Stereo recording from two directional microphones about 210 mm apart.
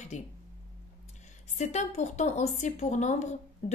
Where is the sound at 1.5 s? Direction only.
35° left (ahead or behind).